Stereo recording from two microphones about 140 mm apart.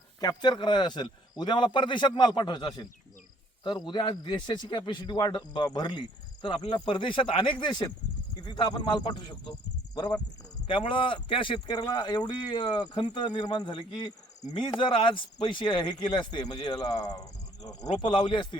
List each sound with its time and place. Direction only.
0.2 s speech: 30° left (ahead or behind)